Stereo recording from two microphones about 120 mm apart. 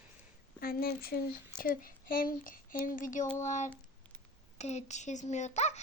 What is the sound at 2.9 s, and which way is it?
Speech, 90° left.